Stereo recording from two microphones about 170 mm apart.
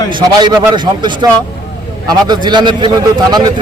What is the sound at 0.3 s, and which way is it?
Speech, 25° right (ahead or behind).